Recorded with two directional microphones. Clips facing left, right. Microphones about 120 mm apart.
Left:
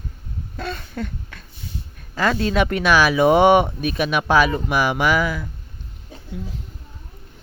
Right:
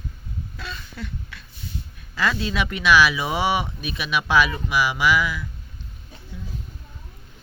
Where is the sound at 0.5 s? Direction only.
50° left (ahead or behind).